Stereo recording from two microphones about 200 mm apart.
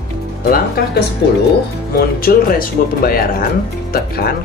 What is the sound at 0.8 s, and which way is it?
Speech, 50° left (ahead or behind).